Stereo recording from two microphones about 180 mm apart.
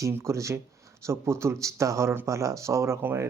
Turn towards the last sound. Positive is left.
turn(degrees=-15)  # may be behind; listen again after turning